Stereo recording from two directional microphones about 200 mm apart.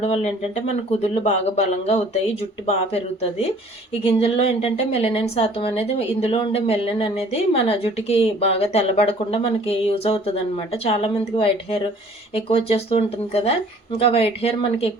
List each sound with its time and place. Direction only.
0.0 s speech: 30° left (ahead or behind)